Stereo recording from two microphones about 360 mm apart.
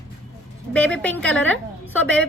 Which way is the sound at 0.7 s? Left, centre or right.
Centre.